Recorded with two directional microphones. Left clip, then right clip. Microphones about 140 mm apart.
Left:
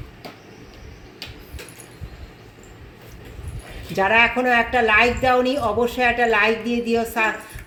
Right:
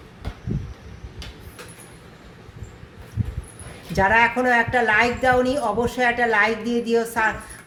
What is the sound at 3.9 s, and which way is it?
Speech, 45° left (ahead or behind).